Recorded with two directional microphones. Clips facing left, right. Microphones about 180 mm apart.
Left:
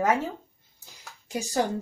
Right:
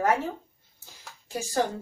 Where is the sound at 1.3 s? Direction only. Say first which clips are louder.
Left 2 dB; 15° left (ahead or behind).